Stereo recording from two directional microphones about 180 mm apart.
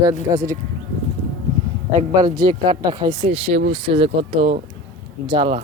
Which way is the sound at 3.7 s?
30° right (ahead or behind).